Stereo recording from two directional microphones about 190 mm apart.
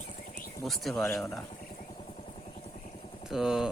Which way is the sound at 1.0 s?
15° left (ahead or behind).